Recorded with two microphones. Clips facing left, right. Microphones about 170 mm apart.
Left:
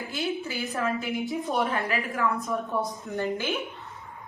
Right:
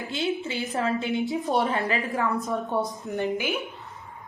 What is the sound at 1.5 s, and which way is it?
Speech, 35° right (ahead or behind).